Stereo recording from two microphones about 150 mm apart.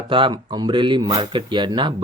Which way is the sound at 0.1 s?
35° right (ahead or behind).